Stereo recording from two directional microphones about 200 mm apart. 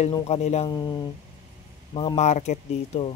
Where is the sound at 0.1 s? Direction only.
30° left (ahead or behind).